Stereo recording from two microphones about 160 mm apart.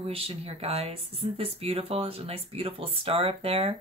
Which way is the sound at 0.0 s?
35° right (ahead or behind).